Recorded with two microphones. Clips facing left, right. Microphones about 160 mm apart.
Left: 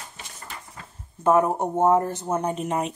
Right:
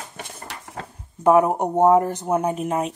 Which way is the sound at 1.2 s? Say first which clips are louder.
Right 3 dB; 15° right (ahead or behind).